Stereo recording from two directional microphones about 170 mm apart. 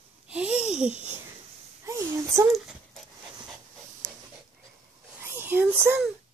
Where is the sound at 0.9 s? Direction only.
45° right (ahead or behind).